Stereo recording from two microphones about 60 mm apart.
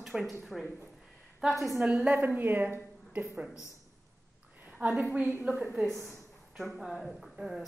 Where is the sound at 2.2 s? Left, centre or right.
Right.